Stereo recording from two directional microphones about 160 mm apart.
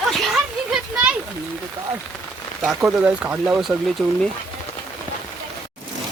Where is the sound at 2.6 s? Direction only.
5° right (ahead or behind).